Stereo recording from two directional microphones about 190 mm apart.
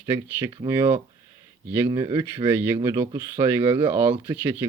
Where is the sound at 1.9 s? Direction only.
20° right (ahead or behind).